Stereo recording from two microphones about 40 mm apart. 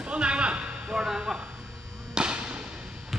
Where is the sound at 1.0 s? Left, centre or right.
Centre.